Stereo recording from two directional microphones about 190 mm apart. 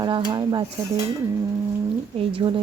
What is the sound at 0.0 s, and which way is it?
Speech, 25° right (ahead or behind).